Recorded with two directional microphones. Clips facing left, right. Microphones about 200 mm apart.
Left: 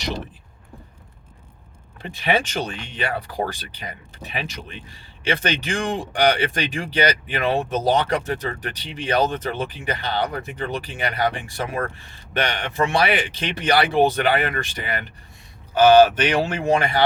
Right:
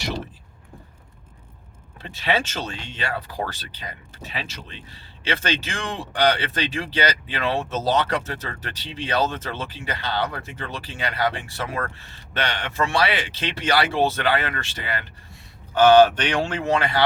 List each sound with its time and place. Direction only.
2.0 s speech: 15° left (ahead or behind)